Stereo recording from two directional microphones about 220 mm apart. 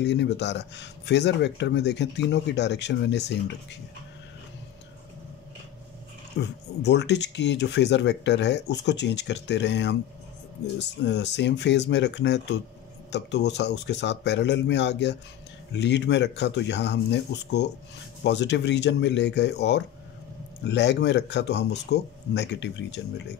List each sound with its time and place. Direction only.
0.0 s speech: 50° left (ahead or behind)
6.3 s speech: 50° left (ahead or behind)